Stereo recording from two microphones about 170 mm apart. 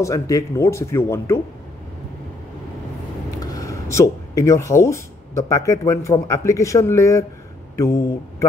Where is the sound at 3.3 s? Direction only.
20° left (ahead or behind).